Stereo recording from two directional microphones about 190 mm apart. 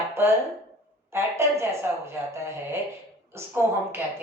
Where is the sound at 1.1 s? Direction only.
15° right (ahead or behind).